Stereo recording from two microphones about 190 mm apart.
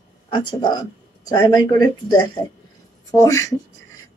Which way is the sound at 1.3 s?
20° left (ahead or behind).